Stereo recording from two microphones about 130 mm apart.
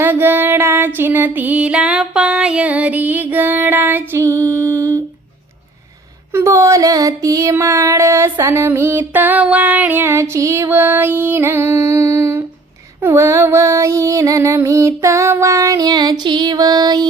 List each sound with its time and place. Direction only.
0.0 s music: 15° right (ahead or behind)
6.3 s female singing: 20° right (ahead or behind)